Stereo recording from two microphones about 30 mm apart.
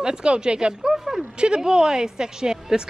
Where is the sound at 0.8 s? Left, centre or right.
Centre.